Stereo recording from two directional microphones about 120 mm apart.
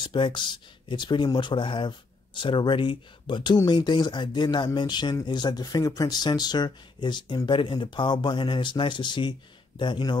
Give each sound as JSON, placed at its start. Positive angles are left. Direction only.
{"t": 0.0, "sound": "speech", "side_deg": 40}